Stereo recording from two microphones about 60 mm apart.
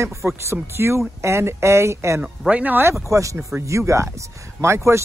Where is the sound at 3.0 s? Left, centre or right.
Right.